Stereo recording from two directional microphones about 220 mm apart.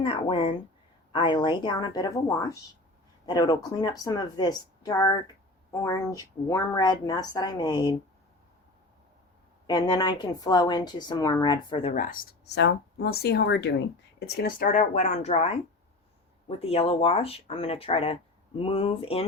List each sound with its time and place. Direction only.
0.0 s a woman's voice: 25° left (ahead or behind)
9.6 s a woman's voice: 20° left (ahead or behind)